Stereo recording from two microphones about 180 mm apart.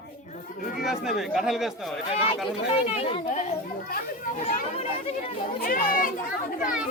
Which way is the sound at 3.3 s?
45° left (ahead or behind).